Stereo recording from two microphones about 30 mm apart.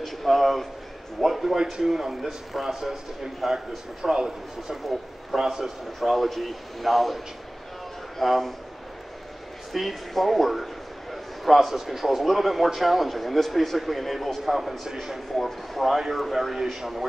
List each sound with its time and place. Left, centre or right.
0.0 s a man's voice: centre
1.2 s a man's voice: centre
2.7 s a man's voice: centre
5.9 s a man's voice: centre
8.2 s a man's voice: centre
9.7 s a sound: centre
11.7 s a man's voice: centre